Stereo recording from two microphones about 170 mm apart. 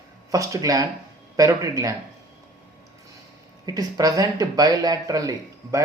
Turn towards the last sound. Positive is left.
turn(degrees=-20)  # may be behind; listen again after turning